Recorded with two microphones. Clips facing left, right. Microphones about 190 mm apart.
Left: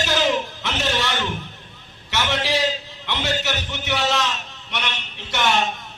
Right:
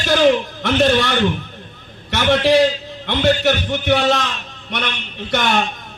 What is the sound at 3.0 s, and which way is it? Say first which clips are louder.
A man's voice: right 10 dB; 55° right (ahead or behind).